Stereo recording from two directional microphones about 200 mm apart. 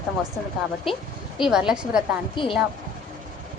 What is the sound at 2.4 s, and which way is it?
Speech, 25° left (ahead or behind).